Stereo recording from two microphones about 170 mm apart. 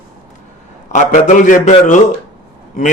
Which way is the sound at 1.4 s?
45° left (ahead or behind).